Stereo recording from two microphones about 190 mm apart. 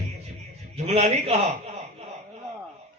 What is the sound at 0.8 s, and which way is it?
Speech, 35° right (ahead or behind).